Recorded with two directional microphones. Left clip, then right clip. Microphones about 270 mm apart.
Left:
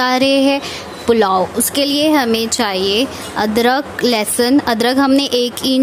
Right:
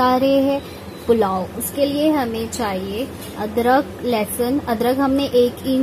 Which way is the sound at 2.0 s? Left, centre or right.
Left.